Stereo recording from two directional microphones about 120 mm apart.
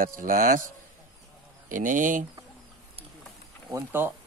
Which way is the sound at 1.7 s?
90° right.